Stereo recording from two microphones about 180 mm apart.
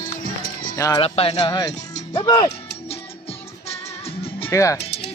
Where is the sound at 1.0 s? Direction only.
30° left (ahead or behind).